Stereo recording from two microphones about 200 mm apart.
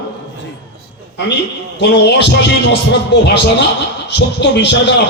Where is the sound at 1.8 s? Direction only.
60° left (ahead or behind).